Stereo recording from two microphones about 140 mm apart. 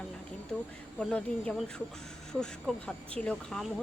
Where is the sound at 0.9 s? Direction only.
5° left (ahead or behind).